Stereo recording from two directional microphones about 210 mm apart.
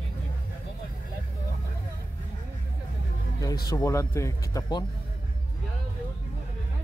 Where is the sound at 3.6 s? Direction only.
15° left (ahead or behind).